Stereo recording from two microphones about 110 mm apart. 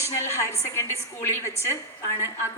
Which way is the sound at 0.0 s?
25° left (ahead or behind).